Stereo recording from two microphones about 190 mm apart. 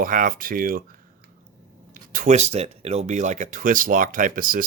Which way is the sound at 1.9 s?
45° right (ahead or behind).